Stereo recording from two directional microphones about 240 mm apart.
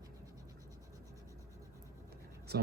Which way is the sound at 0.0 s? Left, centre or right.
Centre.